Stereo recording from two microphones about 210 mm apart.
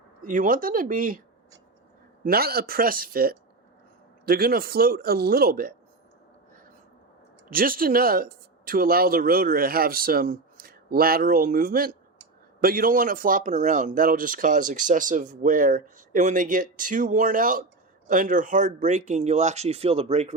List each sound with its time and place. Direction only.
0.2 s speech: 40° right (ahead or behind)
2.2 s speech: 45° right (ahead or behind)
7.5 s speech: 45° right (ahead or behind)